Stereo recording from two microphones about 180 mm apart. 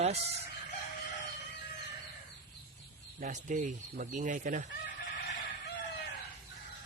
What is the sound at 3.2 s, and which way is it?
Speech, 45° right (ahead or behind).